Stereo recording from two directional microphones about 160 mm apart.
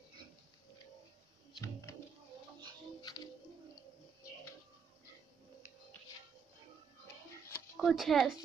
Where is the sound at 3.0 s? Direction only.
25° left (ahead or behind).